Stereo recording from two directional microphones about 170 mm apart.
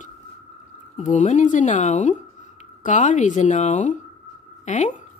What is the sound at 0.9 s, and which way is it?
Speech, 45° left (ahead or behind).